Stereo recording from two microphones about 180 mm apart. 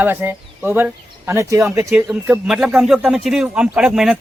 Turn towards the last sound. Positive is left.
turn(degrees=0)  # may be behind; listen again after turning